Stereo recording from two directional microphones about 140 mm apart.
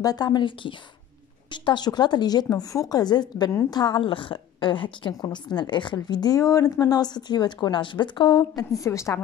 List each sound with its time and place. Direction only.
0.0 s speech: 30° left (ahead or behind)